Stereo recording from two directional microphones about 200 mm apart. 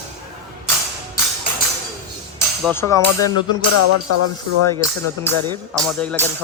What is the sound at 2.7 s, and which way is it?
Speech, 15° left (ahead or behind).